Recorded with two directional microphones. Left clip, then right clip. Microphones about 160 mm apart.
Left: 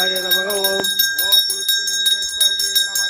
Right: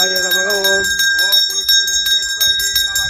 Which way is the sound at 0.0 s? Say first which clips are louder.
Right 3 dB; centre (ahead or behind).